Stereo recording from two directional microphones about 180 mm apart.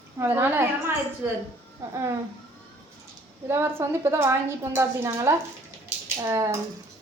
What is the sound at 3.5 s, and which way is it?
Speech, 15° right (ahead or behind).